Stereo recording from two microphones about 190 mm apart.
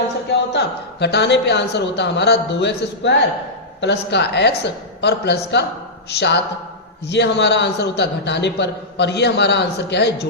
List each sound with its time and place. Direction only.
0.5 s a man's voice: 60° left (ahead or behind)